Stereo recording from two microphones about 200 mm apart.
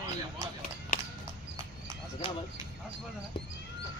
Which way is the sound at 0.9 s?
35° left (ahead or behind).